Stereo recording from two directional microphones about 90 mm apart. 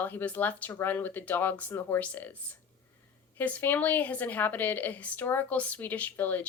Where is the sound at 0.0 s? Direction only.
20° left (ahead or behind).